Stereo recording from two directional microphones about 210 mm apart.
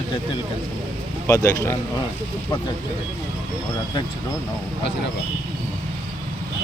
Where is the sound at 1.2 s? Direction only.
15° left (ahead or behind).